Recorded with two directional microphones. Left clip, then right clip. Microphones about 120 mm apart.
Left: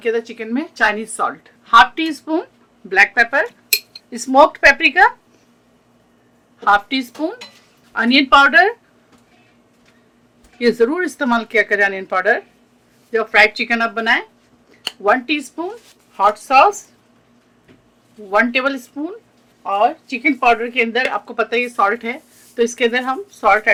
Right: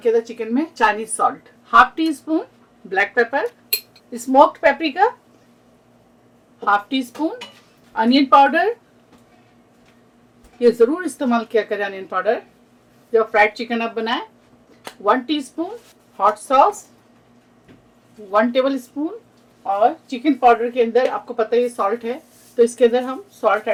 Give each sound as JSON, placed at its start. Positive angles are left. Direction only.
{"t": 0.0, "sound": "a woman's voice", "side_deg": 35}
{"t": 6.6, "sound": "a woman's voice", "side_deg": 45}
{"t": 10.6, "sound": "a woman's voice", "side_deg": 40}
{"t": 18.5, "sound": "a woman's voice", "side_deg": 40}